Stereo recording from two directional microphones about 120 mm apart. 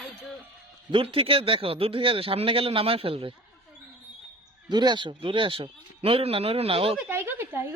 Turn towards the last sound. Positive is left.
turn(degrees=-20)  # may be behind; listen again after turning